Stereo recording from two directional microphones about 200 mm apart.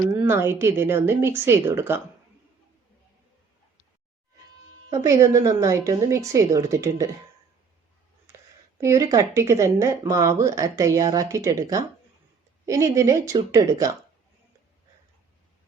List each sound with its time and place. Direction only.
0.1 s speech: 15° right (ahead or behind)
4.9 s speech: 15° right (ahead or behind)
8.8 s speech: 15° right (ahead or behind)